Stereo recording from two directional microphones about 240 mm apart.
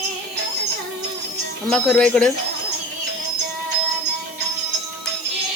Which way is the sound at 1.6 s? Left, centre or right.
Centre.